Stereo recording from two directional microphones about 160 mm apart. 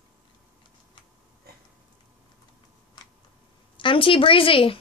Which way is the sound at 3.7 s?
30° left (ahead or behind).